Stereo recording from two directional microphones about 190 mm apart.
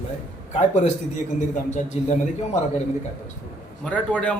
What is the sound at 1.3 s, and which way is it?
Speech, 40° left (ahead or behind).